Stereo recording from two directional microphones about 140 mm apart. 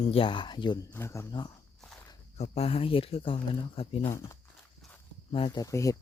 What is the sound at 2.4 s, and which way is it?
Speech, 45° left (ahead or behind).